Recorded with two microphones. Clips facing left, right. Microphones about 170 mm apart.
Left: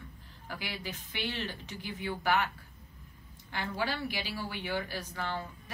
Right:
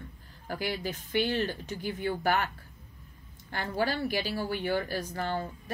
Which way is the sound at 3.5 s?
45° right (ahead or behind).